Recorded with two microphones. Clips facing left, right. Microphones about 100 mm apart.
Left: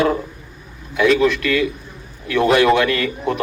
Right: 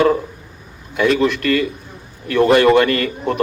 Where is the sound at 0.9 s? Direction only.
40° right (ahead or behind).